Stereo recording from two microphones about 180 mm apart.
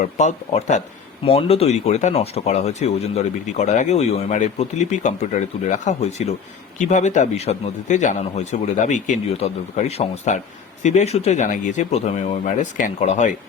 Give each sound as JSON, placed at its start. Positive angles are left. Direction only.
{"t": 0.0, "sound": "speech", "side_deg": 40}